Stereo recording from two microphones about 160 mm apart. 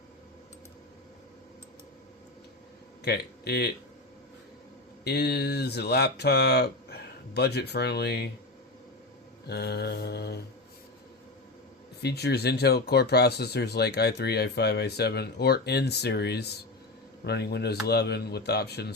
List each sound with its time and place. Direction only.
3.0 s speech: 90° left
5.0 s speech: 90° left
9.5 s speech: 90° left
12.0 s speech: 90° left